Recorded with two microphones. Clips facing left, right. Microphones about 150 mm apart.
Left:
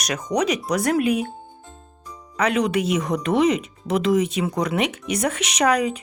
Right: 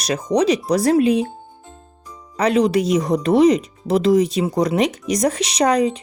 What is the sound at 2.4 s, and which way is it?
Speech, 35° right (ahead or behind).